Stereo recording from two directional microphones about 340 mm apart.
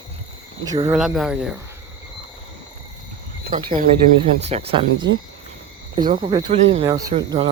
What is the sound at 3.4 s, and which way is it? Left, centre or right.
Speech, centre.